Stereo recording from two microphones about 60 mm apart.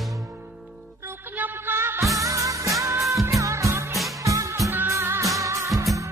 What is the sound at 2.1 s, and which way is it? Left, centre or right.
Music, right.